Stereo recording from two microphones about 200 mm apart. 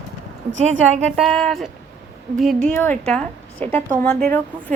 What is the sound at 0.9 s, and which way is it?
Speech, 35° right (ahead or behind).